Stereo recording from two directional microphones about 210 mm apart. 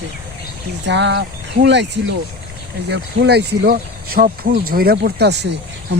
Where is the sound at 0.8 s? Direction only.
55° right (ahead or behind).